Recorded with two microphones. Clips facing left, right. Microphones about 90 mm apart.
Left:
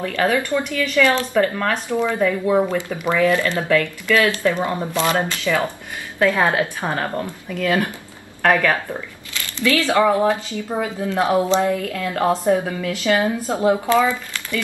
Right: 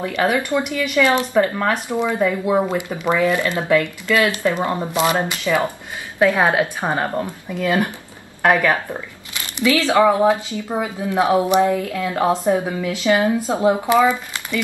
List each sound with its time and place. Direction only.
0.0 s speech: 15° right (ahead or behind)